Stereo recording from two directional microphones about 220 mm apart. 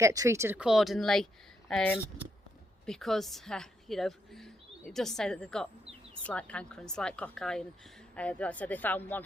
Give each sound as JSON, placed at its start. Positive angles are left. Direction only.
{"t": 0.0, "sound": "a woman's voice", "side_deg": -15}